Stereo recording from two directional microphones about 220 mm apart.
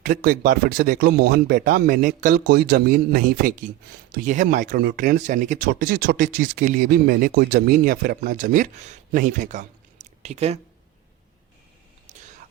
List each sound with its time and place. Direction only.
0.0 s speech: 45° right (ahead or behind)